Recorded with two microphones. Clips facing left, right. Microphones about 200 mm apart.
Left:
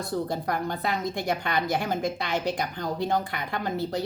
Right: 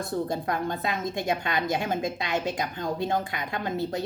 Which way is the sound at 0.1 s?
25° right (ahead or behind).